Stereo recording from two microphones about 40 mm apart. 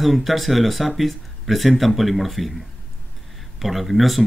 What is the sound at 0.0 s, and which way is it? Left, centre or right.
Speech, centre.